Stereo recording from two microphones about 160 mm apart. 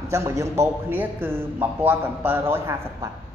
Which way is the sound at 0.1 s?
15° right (ahead or behind).